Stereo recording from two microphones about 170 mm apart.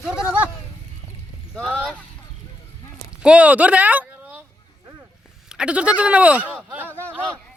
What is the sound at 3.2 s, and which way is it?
Speech, 5° right (ahead or behind).